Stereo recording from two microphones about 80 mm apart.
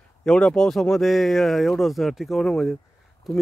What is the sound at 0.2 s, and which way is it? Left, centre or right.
Speech, centre.